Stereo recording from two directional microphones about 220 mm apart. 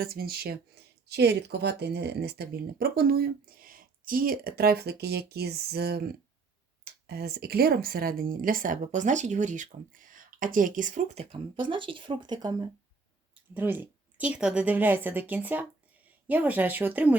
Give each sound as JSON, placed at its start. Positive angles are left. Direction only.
{"t": 0.0, "sound": "speech", "side_deg": -40}
{"t": 7.1, "sound": "speech", "side_deg": -45}